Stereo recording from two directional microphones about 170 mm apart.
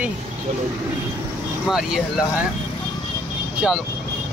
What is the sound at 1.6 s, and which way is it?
Speech, centre (ahead or behind).